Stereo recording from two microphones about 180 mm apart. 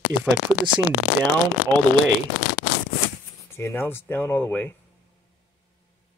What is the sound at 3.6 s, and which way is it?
Speech, 15° left (ahead or behind).